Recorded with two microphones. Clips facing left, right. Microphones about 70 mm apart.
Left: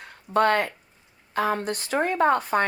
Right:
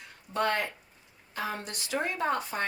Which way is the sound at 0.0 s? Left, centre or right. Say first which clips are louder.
Left 8 dB; left.